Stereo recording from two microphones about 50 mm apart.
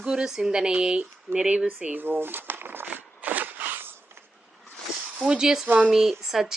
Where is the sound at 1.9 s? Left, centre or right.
Right.